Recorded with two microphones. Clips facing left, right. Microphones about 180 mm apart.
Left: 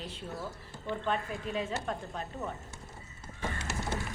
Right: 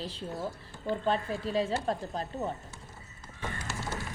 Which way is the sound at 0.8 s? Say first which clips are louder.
Right 4 dB; 35° right (ahead or behind).